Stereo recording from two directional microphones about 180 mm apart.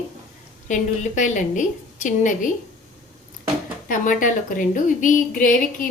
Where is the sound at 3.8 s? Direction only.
45° left (ahead or behind).